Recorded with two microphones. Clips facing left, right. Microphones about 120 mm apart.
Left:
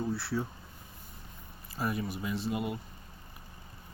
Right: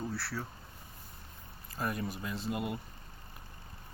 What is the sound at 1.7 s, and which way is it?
Speech, 5° left (ahead or behind).